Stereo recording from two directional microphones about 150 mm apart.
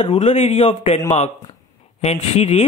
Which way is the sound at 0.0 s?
40° left (ahead or behind).